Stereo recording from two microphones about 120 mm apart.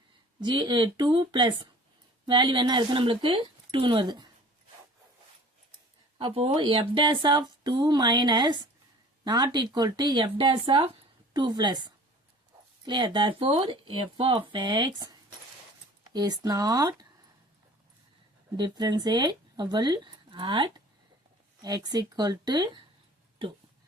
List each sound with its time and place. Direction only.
0.3 s speech: 40° right (ahead or behind)
6.1 s speech: 45° right (ahead or behind)
18.5 s speech: 35° right (ahead or behind)